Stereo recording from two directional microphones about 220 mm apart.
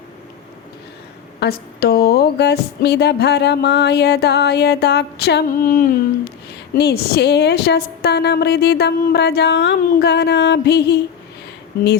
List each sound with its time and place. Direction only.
1.4 s speech: 45° left (ahead or behind)